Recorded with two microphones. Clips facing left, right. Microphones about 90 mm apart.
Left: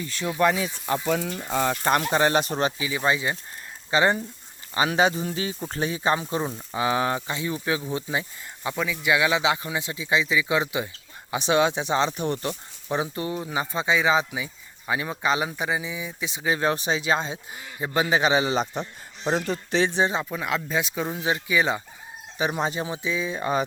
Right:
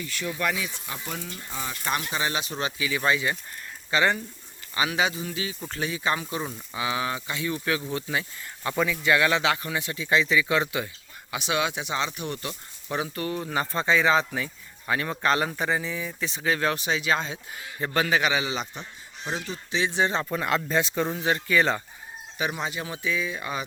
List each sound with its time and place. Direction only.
0.0 s speech: 30° left (ahead or behind)
0.9 s speech: 70° left (ahead or behind)
1.7 s speech: 45° left (ahead or behind); by 4.2 s 20° left (ahead or behind)
4.7 s speech: 35° left (ahead or behind); by 8.7 s 15° left (ahead or behind)
8.7 s speech: centre (ahead or behind)
9.0 s speech: 10° left (ahead or behind)
11.3 s speech: 30° left (ahead or behind)
12.9 s speech: 20° left (ahead or behind)
18.4 s speech: 40° left (ahead or behind)
19.3 s speech: 55° left (ahead or behind)
20.0 s speech: 15° left (ahead or behind)
20.3 s speech: centre (ahead or behind)
22.5 s speech: 35° left (ahead or behind)